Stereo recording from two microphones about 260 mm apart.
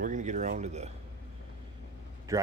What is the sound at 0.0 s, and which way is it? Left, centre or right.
Speech, right.